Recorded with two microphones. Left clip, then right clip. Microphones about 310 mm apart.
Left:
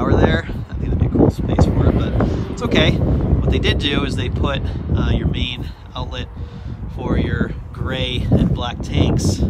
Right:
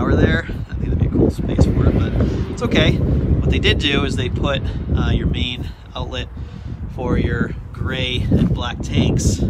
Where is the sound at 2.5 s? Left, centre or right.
Centre.